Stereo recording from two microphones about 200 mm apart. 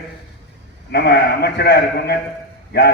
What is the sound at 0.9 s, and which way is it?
A man's voice, 55° left (ahead or behind).